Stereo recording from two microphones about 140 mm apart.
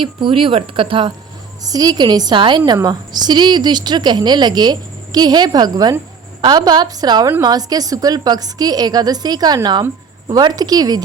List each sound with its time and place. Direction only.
0.0 s a woman's voice: 40° right (ahead or behind)
1.6 s a woman's voice: 25° right (ahead or behind)